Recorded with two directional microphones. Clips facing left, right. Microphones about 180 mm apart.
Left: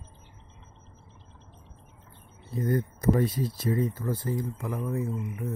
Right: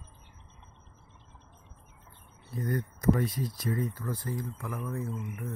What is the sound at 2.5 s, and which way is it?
Speech, 25° left (ahead or behind).